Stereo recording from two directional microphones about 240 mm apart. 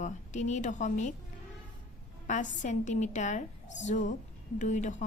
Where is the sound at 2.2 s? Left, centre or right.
Left.